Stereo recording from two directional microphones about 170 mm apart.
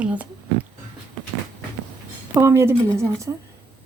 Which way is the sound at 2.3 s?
15° right (ahead or behind).